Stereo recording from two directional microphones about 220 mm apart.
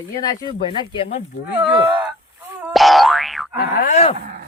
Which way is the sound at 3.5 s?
35° left (ahead or behind).